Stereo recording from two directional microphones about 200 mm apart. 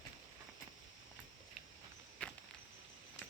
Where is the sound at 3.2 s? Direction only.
65° left (ahead or behind).